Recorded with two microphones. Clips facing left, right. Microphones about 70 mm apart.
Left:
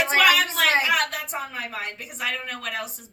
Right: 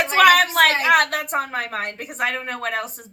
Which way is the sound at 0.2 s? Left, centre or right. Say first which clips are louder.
Right 7 dB; right.